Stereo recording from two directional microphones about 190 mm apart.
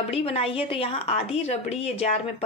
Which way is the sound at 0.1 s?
30° left (ahead or behind).